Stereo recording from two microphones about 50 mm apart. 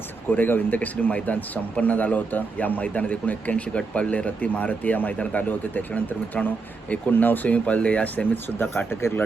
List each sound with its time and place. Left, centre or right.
0.3 s a man's voice: left
8.1 s a man's voice: left
8.9 s speech: left